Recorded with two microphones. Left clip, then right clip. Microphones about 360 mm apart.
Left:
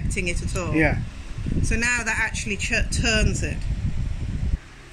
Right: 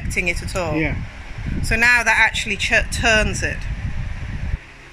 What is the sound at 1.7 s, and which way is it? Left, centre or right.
Speech, centre.